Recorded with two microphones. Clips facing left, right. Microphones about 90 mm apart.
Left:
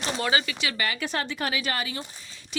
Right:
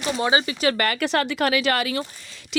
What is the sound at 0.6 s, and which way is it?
Speech, 50° right (ahead or behind).